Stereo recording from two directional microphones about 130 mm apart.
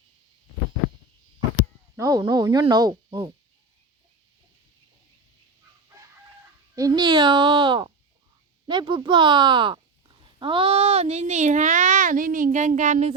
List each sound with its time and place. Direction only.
2.0 s speech: 30° right (ahead or behind)
6.7 s a child's voice: 30° right (ahead or behind); by 13.1 s 65° right (ahead or behind)